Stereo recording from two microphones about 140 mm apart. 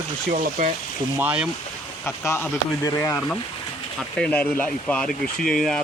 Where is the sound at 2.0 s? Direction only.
20° left (ahead or behind).